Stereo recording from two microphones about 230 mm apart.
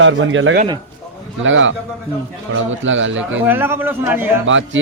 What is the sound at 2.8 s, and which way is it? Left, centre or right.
Speech, right.